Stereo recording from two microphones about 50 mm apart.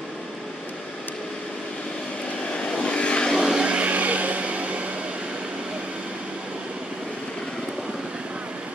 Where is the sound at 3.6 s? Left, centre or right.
Right.